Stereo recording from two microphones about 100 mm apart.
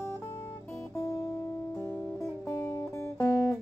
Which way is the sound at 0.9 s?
30° left (ahead or behind).